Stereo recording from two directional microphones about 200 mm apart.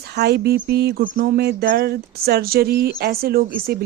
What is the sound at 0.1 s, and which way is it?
Speech, 55° right (ahead or behind).